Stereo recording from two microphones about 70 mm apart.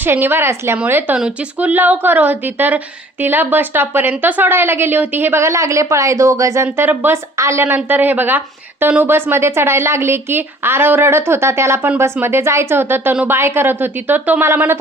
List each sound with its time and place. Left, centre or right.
0.0 s a woman's voice: right
1.1 s a woman's voice: centre
5.4 s a woman's voice: right
6.7 s speech: right
7.3 s a woman's voice: right
7.9 s a woman's voice: right